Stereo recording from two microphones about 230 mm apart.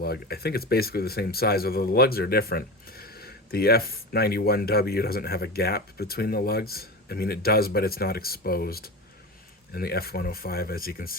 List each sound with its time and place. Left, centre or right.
0.0 s speech: left